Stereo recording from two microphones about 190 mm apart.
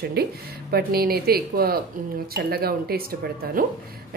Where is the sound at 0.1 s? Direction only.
55° right (ahead or behind).